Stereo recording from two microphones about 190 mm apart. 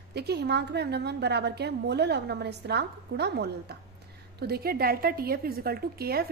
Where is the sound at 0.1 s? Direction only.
60° right (ahead or behind).